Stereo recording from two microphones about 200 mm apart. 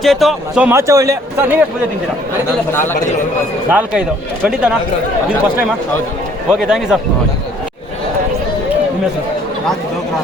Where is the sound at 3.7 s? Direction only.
5° right (ahead or behind).